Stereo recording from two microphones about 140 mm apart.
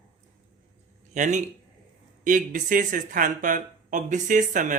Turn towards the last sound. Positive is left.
turn(degrees=-65)  # may be behind; listen again after turning